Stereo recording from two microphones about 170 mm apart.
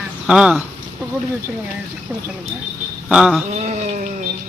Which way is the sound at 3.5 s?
45° right (ahead or behind).